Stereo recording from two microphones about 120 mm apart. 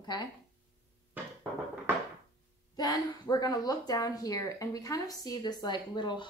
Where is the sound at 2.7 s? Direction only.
30° left (ahead or behind).